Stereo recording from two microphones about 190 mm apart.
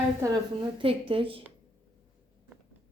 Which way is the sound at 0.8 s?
30° right (ahead or behind).